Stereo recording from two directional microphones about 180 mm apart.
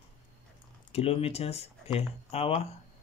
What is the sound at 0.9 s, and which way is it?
Speech, 35° left (ahead or behind).